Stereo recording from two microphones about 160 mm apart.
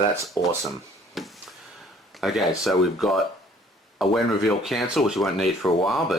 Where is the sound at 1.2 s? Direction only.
Centre (ahead or behind).